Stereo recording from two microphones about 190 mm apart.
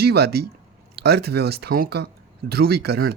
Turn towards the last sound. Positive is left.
turn(degrees=-55)  # may be behind; listen again after turning